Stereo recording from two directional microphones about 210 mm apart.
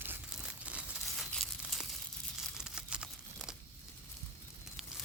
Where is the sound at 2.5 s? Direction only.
5° right (ahead or behind).